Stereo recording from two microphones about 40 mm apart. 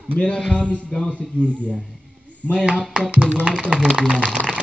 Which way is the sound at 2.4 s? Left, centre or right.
Left.